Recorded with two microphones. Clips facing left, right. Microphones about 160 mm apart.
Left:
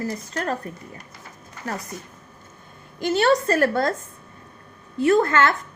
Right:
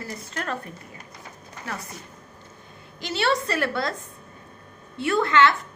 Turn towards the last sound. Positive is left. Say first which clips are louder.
# left 2 dB
turn(degrees=45)  # may be behind; listen again after turning